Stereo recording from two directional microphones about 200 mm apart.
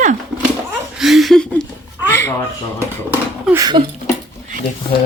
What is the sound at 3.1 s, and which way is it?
Speech, 10° right (ahead or behind).